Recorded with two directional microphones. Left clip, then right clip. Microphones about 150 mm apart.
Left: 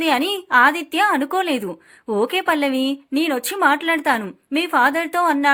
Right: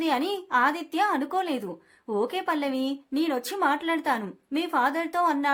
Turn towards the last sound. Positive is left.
turn(degrees=25)  # may be behind; listen again after turning